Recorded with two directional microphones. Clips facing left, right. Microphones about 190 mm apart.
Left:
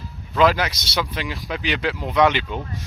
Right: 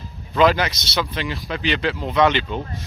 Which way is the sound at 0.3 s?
5° left (ahead or behind).